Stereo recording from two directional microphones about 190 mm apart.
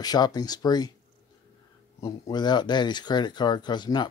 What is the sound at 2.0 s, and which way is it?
Speech, 20° left (ahead or behind).